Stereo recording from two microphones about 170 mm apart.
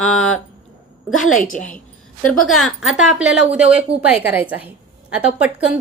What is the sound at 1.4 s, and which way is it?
Speech, 50° left (ahead or behind).